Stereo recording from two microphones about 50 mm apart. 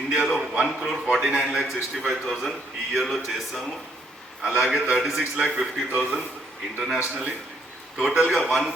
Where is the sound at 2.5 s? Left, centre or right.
Centre.